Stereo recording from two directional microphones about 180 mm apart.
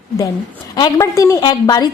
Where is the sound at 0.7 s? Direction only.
25° left (ahead or behind).